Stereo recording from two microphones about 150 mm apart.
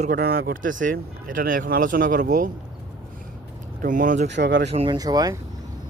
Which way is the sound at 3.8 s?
65° right (ahead or behind).